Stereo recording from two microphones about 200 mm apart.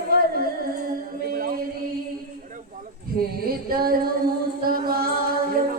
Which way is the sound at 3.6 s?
50° right (ahead or behind).